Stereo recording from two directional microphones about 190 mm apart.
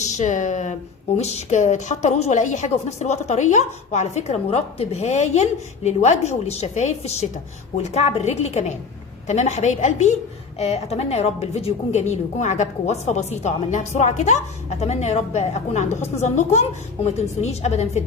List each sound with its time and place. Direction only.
0.0 s a woman's voice: 40° left (ahead or behind)